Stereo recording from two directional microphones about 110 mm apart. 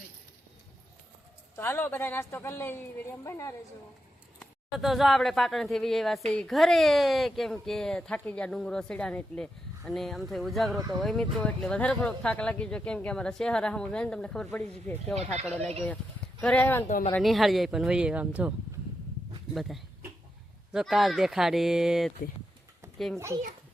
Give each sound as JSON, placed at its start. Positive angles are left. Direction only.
{"t": 1.5, "sound": "speech", "side_deg": 20}
{"t": 4.8, "sound": "a woman's voice", "side_deg": 0}
{"t": 15.1, "sound": "speech", "side_deg": -85}
{"t": 16.4, "sound": "speech", "side_deg": 15}
{"t": 17.2, "sound": "speech", "side_deg": 0}
{"t": 19.5, "sound": "a woman's voice", "side_deg": 0}
{"t": 23.1, "sound": "a child's voice", "side_deg": -25}